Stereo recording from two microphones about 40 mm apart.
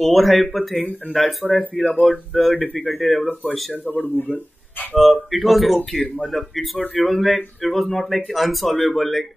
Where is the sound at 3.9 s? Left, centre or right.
Left.